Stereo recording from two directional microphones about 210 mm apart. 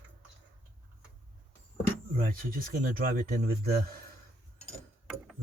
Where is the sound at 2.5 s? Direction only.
40° right (ahead or behind).